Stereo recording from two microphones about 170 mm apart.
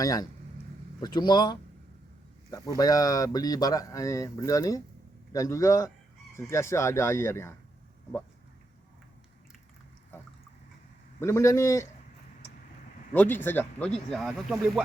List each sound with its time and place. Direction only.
0.0 s speech: 20° left (ahead or behind)
2.7 s speech: 20° left (ahead or behind)
11.2 s speech: 15° left (ahead or behind)
13.1 s speech: 10° left (ahead or behind)